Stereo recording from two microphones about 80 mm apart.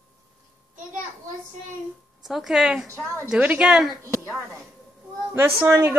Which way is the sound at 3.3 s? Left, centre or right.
Centre.